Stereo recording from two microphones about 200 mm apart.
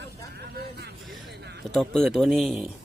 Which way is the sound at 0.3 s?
55° right (ahead or behind).